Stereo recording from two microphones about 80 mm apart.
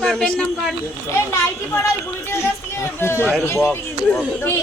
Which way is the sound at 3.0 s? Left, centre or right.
Left.